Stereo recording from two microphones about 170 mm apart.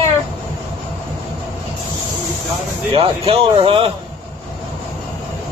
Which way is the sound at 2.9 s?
30° right (ahead or behind).